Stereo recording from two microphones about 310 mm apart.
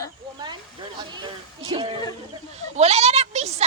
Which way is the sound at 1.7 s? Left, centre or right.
Centre.